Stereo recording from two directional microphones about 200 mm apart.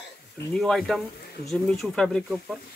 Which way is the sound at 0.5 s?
Centre (ahead or behind).